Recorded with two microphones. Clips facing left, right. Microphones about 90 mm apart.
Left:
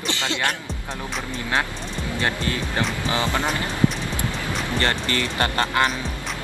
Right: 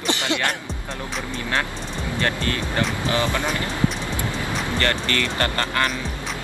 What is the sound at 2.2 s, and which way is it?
Speech, 20° left (ahead or behind).